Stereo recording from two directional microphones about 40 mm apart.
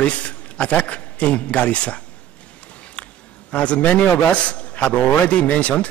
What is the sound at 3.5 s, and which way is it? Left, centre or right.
A man's voice, left.